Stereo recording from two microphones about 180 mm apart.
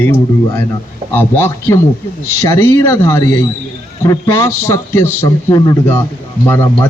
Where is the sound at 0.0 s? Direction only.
10° left (ahead or behind).